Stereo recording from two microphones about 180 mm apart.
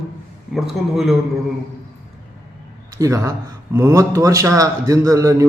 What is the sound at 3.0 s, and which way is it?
A man's voice, 15° right (ahead or behind).